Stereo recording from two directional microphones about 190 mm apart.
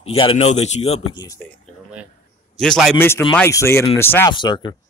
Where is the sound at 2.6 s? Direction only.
Centre (ahead or behind).